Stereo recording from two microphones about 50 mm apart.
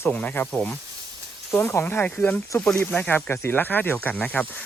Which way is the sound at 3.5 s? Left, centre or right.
Left.